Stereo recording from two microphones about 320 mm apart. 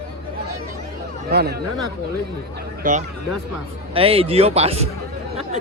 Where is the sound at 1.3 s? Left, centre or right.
Right.